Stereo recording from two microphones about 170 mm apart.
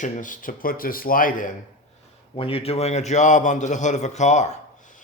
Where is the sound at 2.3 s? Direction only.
35° left (ahead or behind).